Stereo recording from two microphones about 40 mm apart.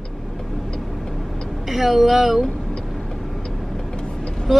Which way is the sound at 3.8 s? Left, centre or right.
Centre.